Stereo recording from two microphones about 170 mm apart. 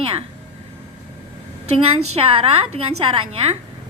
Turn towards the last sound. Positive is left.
turn(degrees=-35)  # may be behind; listen again after turning